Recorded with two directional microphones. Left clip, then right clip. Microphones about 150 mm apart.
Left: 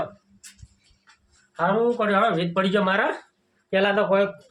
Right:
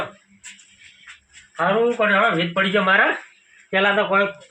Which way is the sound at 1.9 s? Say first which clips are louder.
Right 4 dB; 35° left (ahead or behind).